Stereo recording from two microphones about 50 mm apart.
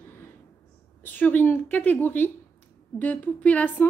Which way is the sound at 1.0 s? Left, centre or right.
Left.